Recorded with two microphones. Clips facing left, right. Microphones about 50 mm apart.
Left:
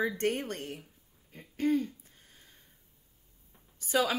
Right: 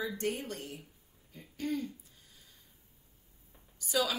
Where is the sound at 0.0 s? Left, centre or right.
Left.